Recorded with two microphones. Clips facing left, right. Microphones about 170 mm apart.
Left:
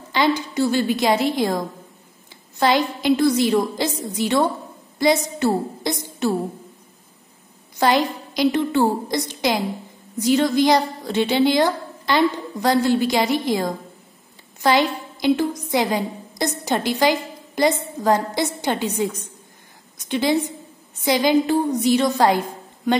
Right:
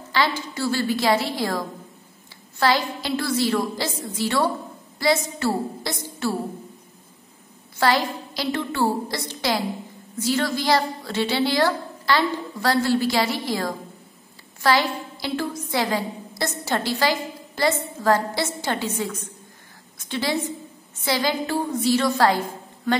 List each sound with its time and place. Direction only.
0.1 s a woman's voice: 20° left (ahead or behind)
7.7 s a woman's voice: 20° left (ahead or behind)